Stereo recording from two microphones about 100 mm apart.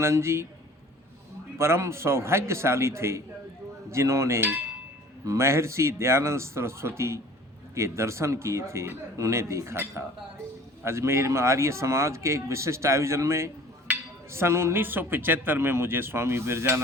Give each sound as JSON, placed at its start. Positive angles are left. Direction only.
{"t": 0.0, "sound": "speech", "side_deg": -25}
{"t": 1.5, "sound": "speech", "side_deg": -25}
{"t": 13.9, "sound": "a sound", "side_deg": -15}
{"t": 14.3, "sound": "speech", "side_deg": -25}